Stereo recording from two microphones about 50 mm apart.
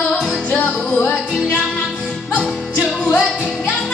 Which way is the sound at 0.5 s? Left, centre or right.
Left.